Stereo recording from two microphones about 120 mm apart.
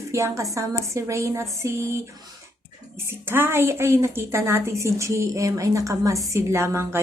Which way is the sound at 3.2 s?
20° right (ahead or behind).